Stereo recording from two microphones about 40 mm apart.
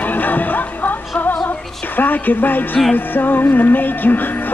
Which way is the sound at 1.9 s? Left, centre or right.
Left.